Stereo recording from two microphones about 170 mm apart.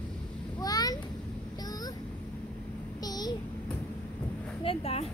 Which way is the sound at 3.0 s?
25° left (ahead or behind).